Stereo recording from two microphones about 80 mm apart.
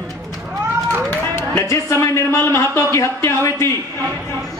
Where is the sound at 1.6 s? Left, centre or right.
Left.